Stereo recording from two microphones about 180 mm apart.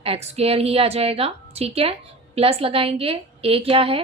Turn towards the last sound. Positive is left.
turn(degrees=-30)  # may be behind; listen again after turning